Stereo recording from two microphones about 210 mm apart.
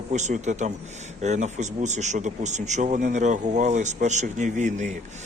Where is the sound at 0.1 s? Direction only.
35° right (ahead or behind).